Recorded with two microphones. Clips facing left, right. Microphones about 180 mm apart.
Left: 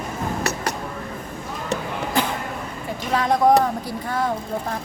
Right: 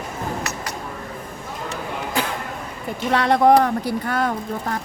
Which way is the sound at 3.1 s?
75° right (ahead or behind).